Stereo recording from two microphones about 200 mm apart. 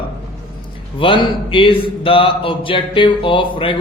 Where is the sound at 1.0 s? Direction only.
25° left (ahead or behind).